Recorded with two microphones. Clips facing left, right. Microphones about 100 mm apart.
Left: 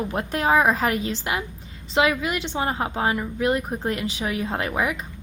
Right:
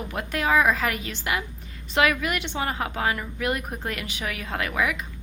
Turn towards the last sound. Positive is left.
turn(degrees=30)  # may be behind; listen again after turning